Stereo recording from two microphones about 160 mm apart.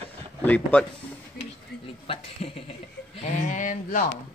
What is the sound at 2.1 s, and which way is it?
Speech, 35° left (ahead or behind).